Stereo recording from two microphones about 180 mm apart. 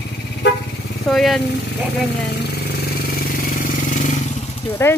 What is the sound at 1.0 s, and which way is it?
Speech, centre (ahead or behind).